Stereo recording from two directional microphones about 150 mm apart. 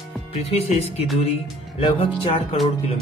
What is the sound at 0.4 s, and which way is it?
Speech, 45° left (ahead or behind).